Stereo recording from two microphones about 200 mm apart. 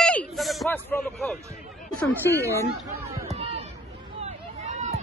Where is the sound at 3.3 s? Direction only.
30° right (ahead or behind).